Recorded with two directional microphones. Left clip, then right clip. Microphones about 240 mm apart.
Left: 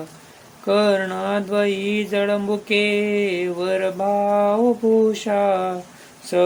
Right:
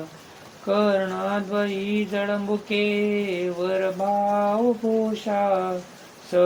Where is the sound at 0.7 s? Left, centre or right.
Left.